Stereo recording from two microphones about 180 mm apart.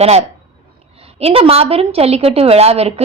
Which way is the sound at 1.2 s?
35° right (ahead or behind).